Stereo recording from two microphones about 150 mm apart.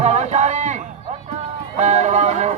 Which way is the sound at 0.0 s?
50° right (ahead or behind).